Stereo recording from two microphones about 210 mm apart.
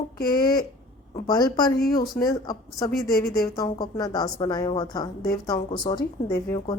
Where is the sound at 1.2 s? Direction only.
20° left (ahead or behind).